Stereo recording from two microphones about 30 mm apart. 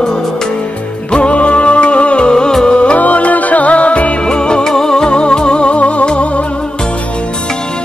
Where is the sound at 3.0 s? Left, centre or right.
Left.